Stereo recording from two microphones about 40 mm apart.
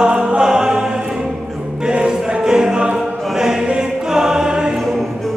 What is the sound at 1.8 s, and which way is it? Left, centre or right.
Music, centre.